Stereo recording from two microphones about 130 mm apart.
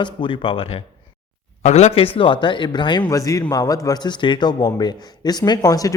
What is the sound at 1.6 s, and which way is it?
Speech, 55° left (ahead or behind).